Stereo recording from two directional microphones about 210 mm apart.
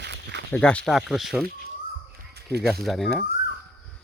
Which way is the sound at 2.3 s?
50° right (ahead or behind).